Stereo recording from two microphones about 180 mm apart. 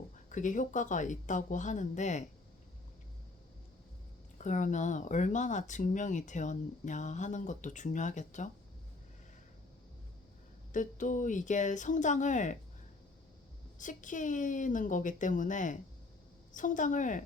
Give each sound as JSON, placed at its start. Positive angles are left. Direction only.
{"t": 0.3, "sound": "speech", "side_deg": 45}
{"t": 4.4, "sound": "speech", "side_deg": 45}
{"t": 10.7, "sound": "speech", "side_deg": 45}
{"t": 13.7, "sound": "speech", "side_deg": 45}